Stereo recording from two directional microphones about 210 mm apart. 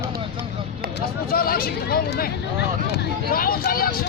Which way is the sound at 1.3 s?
45° left (ahead or behind).